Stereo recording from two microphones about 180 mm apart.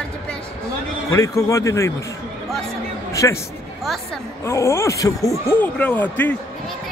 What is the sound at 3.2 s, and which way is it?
Speech, 15° left (ahead or behind).